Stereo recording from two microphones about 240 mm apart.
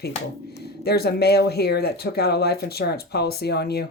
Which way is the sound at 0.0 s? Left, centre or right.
Left.